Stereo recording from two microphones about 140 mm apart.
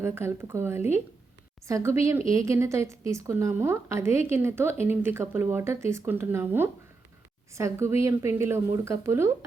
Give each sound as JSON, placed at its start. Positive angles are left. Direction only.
{"t": 0.0, "sound": "a woman's voice", "side_deg": -15}